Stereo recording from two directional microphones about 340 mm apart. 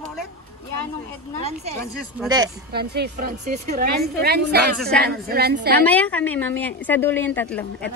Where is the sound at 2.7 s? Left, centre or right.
Right.